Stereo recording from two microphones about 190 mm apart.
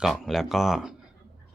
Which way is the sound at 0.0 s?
Centre (ahead or behind).